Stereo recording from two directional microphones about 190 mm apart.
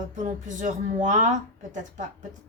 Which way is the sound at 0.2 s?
40° right (ahead or behind).